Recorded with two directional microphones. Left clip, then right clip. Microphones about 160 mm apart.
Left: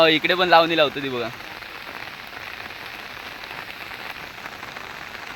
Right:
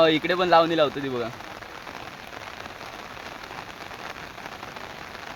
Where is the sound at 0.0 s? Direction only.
Centre (ahead or behind).